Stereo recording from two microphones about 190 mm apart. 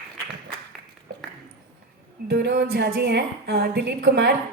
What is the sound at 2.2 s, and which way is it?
A woman's voice, 60° right (ahead or behind).